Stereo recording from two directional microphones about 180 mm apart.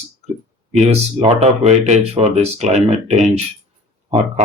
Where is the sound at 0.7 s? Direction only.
35° right (ahead or behind).